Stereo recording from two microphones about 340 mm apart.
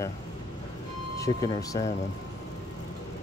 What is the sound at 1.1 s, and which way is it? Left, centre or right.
Speech, centre.